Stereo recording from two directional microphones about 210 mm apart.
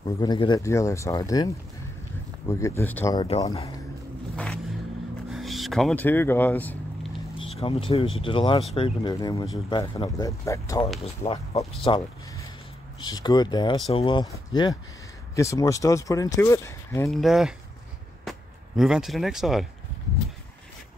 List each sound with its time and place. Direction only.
0.0 s speech: 20° left (ahead or behind)
3.4 s speech: 30° left (ahead or behind)
4.4 s vehicle: 5° left (ahead or behind)
5.3 s speech: centre (ahead or behind)
7.3 s speech: 25° left (ahead or behind)
11.1 s speech: 30° left (ahead or behind)
17.1 s speech: centre (ahead or behind)
18.3 s a sound: centre (ahead or behind)
18.8 s speech: centre (ahead or behind)